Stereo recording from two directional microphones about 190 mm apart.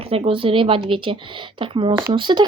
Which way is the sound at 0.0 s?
30° right (ahead or behind).